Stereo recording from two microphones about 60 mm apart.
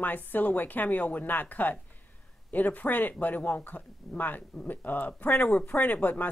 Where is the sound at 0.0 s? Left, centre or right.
Left.